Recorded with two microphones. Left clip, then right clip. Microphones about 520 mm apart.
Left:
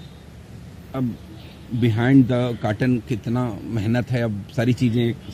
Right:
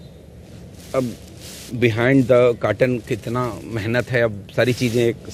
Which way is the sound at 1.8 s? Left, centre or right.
Right.